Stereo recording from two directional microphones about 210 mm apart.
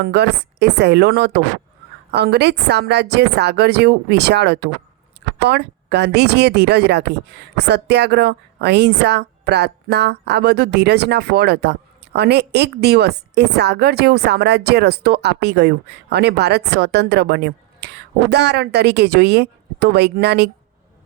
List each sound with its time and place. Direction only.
0.0 s speech: 50° right (ahead or behind)